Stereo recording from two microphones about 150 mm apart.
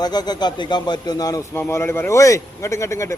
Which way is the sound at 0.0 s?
25° left (ahead or behind).